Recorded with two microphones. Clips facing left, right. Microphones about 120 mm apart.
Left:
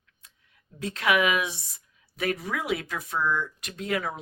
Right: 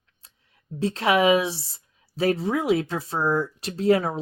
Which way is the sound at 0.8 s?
30° right (ahead or behind).